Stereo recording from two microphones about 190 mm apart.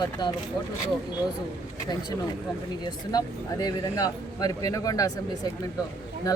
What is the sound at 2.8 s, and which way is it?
Speech, 20° left (ahead or behind).